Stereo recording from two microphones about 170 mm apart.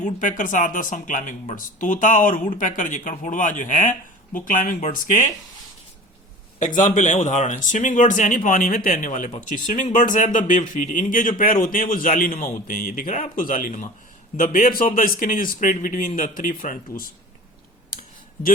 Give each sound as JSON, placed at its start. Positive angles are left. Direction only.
{"t": 0.0, "sound": "speech", "side_deg": 50}
{"t": 6.6, "sound": "speech", "side_deg": 50}